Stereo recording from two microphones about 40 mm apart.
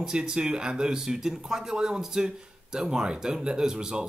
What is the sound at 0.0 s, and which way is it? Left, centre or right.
Speech, centre.